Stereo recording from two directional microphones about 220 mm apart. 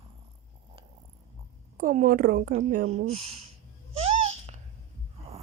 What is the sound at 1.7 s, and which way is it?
Speech, 35° right (ahead or behind).